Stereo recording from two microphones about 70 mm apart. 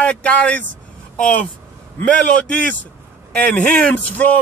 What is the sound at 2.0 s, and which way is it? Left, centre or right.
A man's voice, centre.